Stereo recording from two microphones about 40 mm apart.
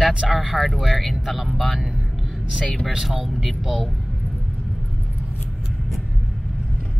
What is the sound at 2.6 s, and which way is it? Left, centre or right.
Speech, left.